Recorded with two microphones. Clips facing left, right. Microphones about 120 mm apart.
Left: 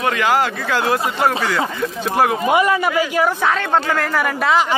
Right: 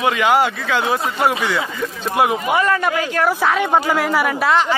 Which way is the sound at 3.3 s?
5° right (ahead or behind).